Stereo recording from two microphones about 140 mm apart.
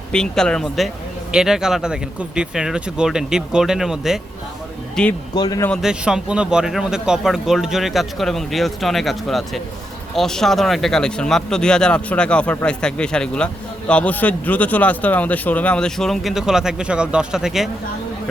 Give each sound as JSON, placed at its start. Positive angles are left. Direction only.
{"t": 0.1, "sound": "a man's voice", "side_deg": 5}
{"t": 5.3, "sound": "speech", "side_deg": 30}
{"t": 5.8, "sound": "a man's voice", "side_deg": -5}